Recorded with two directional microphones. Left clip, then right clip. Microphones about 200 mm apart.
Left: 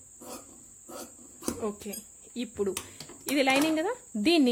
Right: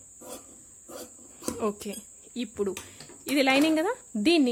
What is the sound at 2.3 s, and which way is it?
Speech, 15° right (ahead or behind).